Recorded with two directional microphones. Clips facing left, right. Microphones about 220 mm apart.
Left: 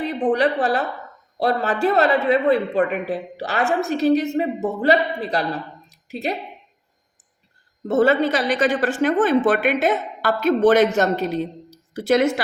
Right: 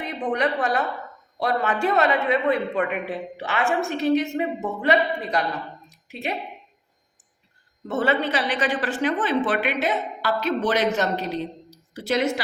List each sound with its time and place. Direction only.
0.0 s a woman's voice: 35° left (ahead or behind)
5.9 s a sound: 35° left (ahead or behind)
7.9 s speech: 40° left (ahead or behind)